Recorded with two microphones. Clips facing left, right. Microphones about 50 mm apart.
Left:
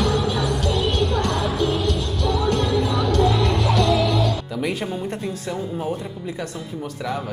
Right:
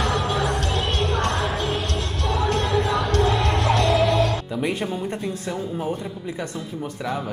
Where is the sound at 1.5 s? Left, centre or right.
Right.